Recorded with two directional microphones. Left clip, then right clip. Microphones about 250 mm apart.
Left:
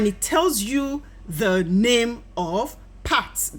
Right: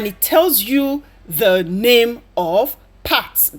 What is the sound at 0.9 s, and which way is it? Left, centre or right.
A woman's voice, centre.